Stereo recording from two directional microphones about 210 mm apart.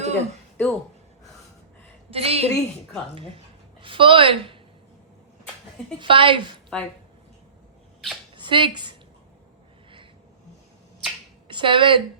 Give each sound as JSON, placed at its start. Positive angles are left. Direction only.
{"t": 0.0, "sound": "a sound", "side_deg": -30}
{"t": 0.5, "sound": "speech", "side_deg": 5}
{"t": 2.0, "sound": "a woman's voice", "side_deg": -30}
{"t": 6.0, "sound": "a woman's voice", "side_deg": -25}
{"t": 6.7, "sound": "speech", "side_deg": 0}
{"t": 8.4, "sound": "speech", "side_deg": -25}
{"t": 11.4, "sound": "speech", "side_deg": -25}